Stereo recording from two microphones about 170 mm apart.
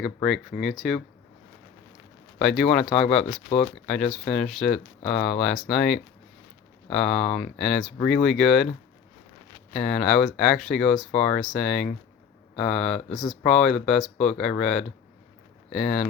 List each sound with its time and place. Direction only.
0.2 s speech: centre (ahead or behind)
2.4 s speech: centre (ahead or behind)
3.5 s speech: 35° left (ahead or behind)
3.8 s speech: 5° left (ahead or behind)
7.2 s speech: 40° left (ahead or behind)
7.6 s speech: centre (ahead or behind)
9.8 s speech: 5° left (ahead or behind)
15.7 s speech: 5° left (ahead or behind)